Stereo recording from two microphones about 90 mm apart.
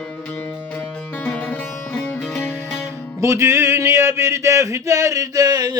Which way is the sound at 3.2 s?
30° right (ahead or behind).